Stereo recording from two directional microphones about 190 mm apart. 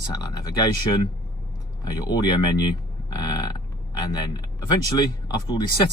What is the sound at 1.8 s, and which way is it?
Speech, 20° left (ahead or behind).